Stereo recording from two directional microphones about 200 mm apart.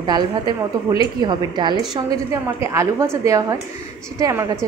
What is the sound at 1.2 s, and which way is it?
A woman's voice, 20° right (ahead or behind).